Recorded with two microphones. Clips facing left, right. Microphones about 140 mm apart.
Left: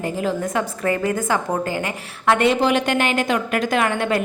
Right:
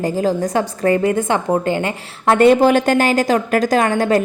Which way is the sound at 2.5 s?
45° right (ahead or behind).